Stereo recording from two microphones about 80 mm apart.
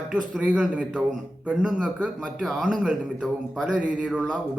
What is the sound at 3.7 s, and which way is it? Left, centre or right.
Speech, centre.